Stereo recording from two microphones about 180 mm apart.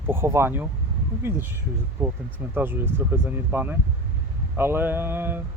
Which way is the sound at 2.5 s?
10° right (ahead or behind).